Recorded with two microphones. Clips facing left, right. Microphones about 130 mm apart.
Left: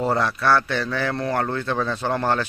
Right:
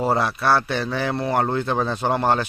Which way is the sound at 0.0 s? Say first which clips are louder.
Right 1 dB; 15° right (ahead or behind).